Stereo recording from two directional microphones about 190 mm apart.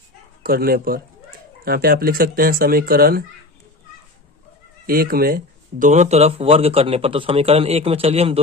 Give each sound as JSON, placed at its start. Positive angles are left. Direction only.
{"t": 0.4, "sound": "speech", "side_deg": -50}
{"t": 4.9, "sound": "speech", "side_deg": -50}
{"t": 5.8, "sound": "a man's voice", "side_deg": -40}